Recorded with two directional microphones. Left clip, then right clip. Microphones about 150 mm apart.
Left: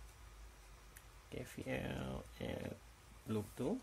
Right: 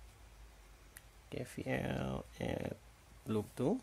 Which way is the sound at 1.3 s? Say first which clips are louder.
Right 4 dB; 40° right (ahead or behind).